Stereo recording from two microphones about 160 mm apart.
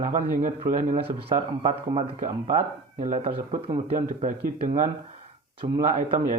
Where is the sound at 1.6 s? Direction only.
35° right (ahead or behind).